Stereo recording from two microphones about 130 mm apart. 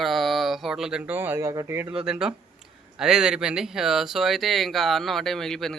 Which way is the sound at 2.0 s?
5° right (ahead or behind).